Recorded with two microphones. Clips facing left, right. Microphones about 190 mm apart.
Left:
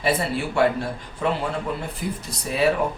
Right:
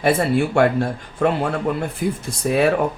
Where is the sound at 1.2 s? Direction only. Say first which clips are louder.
Right 5 dB; 65° right (ahead or behind).